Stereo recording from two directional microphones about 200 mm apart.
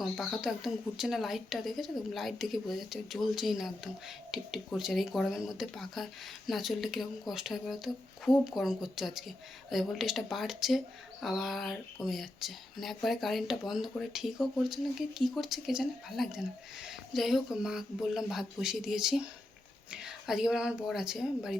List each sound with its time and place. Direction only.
0.0 s speech: centre (ahead or behind)